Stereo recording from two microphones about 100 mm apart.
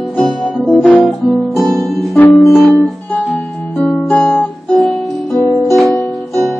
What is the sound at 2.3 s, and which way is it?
Music, centre (ahead or behind).